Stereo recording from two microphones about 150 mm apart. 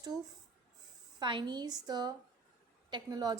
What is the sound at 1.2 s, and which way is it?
A woman's voice, 30° right (ahead or behind).